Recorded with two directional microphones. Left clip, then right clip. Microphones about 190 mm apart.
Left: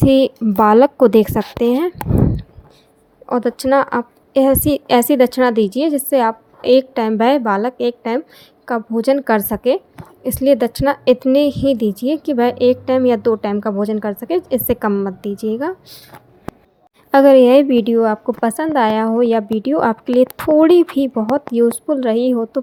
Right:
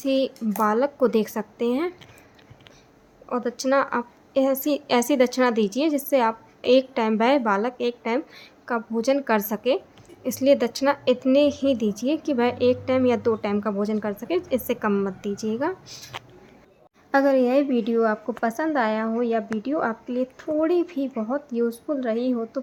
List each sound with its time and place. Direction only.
0.0 s a woman's voice: 35° left (ahead or behind)
3.2 s a woman's voice: 30° left (ahead or behind)
17.1 s a woman's voice: 40° left (ahead or behind)